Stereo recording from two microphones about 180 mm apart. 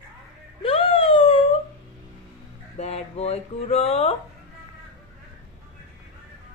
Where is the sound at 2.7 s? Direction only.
35° left (ahead or behind).